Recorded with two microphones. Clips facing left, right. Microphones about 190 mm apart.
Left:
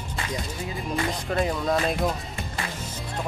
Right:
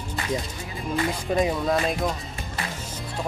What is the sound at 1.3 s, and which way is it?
Speech, 15° right (ahead or behind).